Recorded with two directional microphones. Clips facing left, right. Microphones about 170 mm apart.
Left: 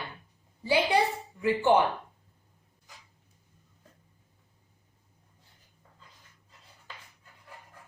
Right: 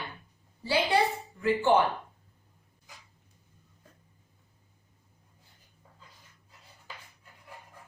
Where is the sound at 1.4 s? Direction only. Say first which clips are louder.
Left 1 dB; 15° left (ahead or behind).